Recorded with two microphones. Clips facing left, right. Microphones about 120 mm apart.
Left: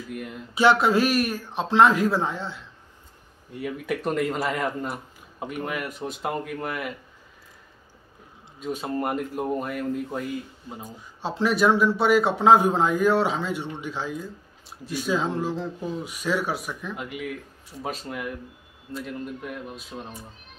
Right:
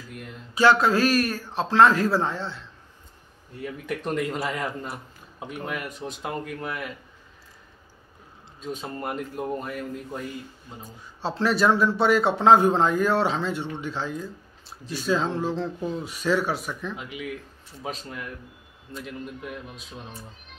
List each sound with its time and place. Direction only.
0.1 s speech: 5° left (ahead or behind)
0.6 s a man's voice: 20° left (ahead or behind); by 6.9 s 5° left (ahead or behind)
8.5 s speech: 10° left (ahead or behind)